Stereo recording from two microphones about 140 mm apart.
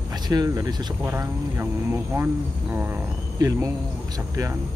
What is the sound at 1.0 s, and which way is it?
Speech, 20° right (ahead or behind).